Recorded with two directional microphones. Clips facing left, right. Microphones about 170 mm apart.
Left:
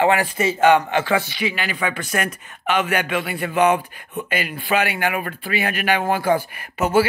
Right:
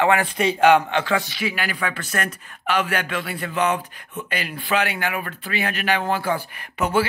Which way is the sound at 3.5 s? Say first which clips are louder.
Left 5 dB; 60° left (ahead or behind).